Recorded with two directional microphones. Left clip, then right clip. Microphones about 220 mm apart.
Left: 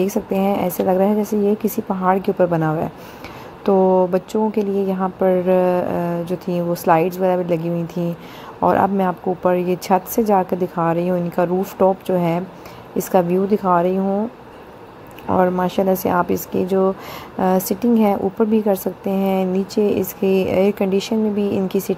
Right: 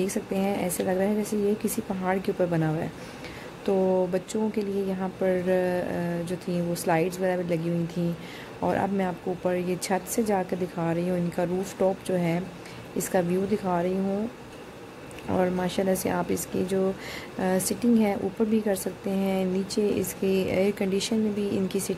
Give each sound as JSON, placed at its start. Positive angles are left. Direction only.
{"t": 0.0, "sound": "a woman's voice", "side_deg": 10}
{"t": 15.2, "sound": "a woman's voice", "side_deg": 5}